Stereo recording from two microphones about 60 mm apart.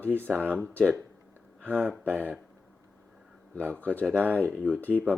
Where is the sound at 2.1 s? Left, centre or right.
Right.